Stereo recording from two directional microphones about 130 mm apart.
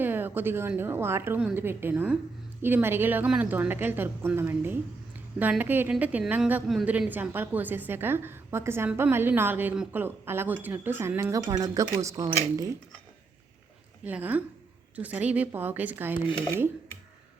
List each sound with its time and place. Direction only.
0.0 s a sound: 15° right (ahead or behind)
0.8 s a woman's voice: 20° right (ahead or behind)
14.0 s a woman's voice: 10° right (ahead or behind)